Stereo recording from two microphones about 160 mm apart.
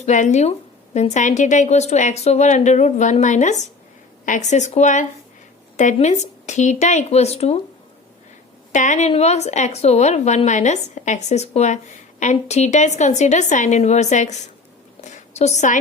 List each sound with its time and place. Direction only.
0.0 s a woman's voice: 50° left (ahead or behind)
8.7 s a woman's voice: 50° left (ahead or behind)